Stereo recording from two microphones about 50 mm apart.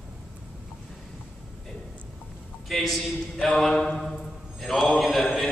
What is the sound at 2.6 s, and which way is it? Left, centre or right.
A man's voice, centre.